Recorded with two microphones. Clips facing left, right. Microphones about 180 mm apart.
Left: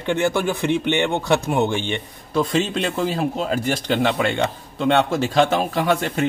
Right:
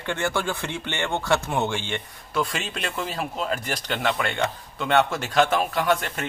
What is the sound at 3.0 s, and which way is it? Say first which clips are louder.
Speech: left 6 dB; 30° left (ahead or behind).